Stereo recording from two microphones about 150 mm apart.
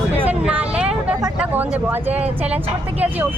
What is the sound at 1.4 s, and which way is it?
Speech, 10° right (ahead or behind).